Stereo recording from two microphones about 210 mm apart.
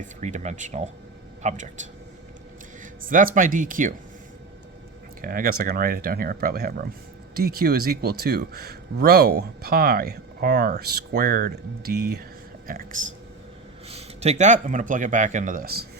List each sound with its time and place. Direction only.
0.2 s speech: 35° right (ahead or behind)
3.0 s speech: 40° right (ahead or behind)
5.2 s speech: 45° right (ahead or behind)
13.8 s speech: 30° right (ahead or behind); by 15.9 s 45° right (ahead or behind)